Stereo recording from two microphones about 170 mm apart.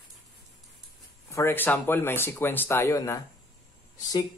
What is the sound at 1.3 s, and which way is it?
Speech, 15° left (ahead or behind).